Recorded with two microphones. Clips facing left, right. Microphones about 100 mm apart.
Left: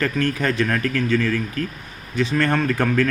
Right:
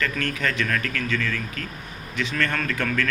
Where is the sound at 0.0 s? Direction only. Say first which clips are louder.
Left 5 dB; 35° left (ahead or behind).